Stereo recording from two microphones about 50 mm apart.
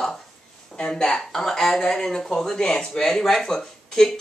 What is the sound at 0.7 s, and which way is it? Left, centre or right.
A woman's voice, centre.